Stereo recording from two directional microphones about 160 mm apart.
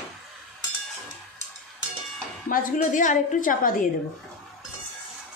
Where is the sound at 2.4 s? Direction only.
55° left (ahead or behind).